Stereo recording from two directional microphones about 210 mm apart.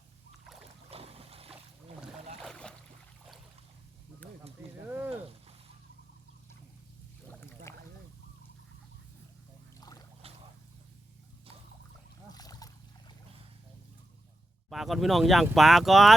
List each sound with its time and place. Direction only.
0.9 s boat: 30° right (ahead or behind)
2.4 s a sound: 5° left (ahead or behind)
4.9 s a sound: 10° right (ahead or behind)
7.7 s rowboat: 10° left (ahead or behind)
10.2 s boat: 25° right (ahead or behind)
12.3 s boat: 20° left (ahead or behind)
14.7 s speech: centre (ahead or behind)